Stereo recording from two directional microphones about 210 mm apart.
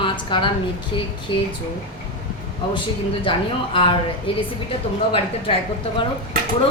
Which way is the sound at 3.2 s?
25° left (ahead or behind).